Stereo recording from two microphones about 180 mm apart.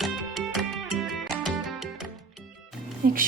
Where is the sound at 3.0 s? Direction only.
50° right (ahead or behind).